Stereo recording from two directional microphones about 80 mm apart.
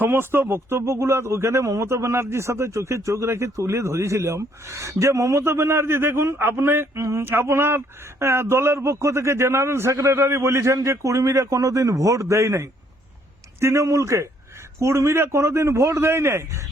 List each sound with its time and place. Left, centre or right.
0.0 s speech: right